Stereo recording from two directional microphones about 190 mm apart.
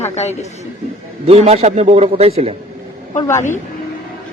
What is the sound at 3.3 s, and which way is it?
Speech, 15° left (ahead or behind).